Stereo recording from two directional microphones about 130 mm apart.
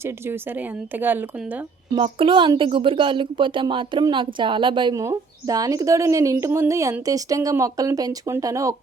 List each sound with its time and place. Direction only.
0.0 s a woman's voice: 15° right (ahead or behind)
2.0 s speech: 40° right (ahead or behind)
4.9 s speech: 25° right (ahead or behind)